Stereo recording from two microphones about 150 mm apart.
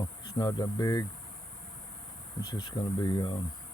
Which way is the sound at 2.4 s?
30° left (ahead or behind).